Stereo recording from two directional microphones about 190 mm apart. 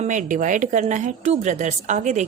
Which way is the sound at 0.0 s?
40° right (ahead or behind).